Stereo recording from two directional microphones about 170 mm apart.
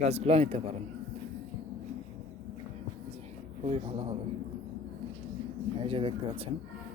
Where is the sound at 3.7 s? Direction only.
35° right (ahead or behind).